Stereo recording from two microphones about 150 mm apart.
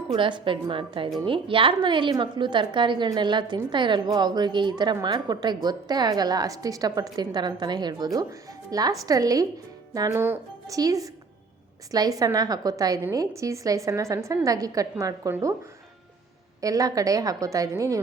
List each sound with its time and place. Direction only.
0.1 s a woman's voice: 30° right (ahead or behind)
16.6 s a woman's voice: 25° right (ahead or behind)